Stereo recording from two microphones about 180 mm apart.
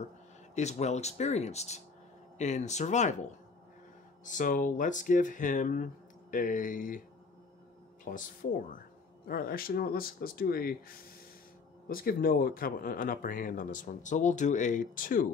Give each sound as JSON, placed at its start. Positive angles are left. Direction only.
{"t": 0.6, "sound": "speech", "side_deg": 40}
{"t": 4.2, "sound": "speech", "side_deg": 45}
{"t": 8.0, "sound": "speech", "side_deg": 50}